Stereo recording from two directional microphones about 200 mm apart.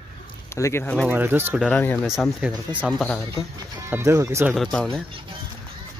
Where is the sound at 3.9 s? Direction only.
15° right (ahead or behind).